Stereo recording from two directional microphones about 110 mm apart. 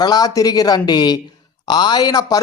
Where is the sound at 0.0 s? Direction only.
35° left (ahead or behind).